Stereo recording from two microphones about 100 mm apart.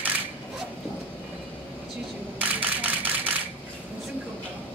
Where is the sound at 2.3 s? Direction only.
15° right (ahead or behind).